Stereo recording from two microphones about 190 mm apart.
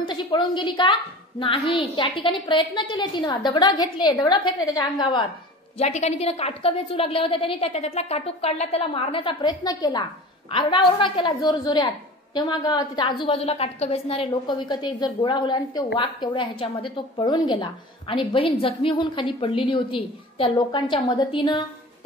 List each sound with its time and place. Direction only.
0.1 s a woman's voice: 25° left (ahead or behind)
5.8 s a woman's voice: 35° left (ahead or behind)